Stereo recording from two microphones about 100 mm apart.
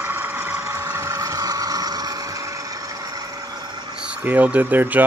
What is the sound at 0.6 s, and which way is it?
Vehicle, 30° right (ahead or behind).